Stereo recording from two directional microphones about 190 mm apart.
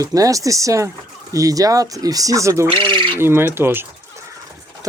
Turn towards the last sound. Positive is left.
turn(degrees=-10)  # may be behind; listen again after turning